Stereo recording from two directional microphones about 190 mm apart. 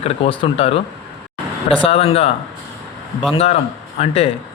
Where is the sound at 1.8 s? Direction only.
30° left (ahead or behind).